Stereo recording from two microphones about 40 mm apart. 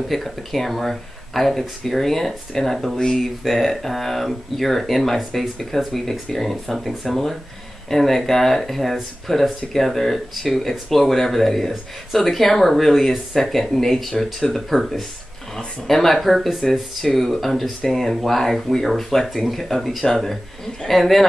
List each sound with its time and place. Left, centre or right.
0.1 s speech: centre
3.0 s speech: centre